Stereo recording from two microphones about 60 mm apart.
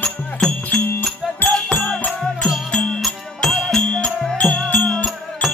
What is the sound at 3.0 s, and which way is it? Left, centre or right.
Music, centre.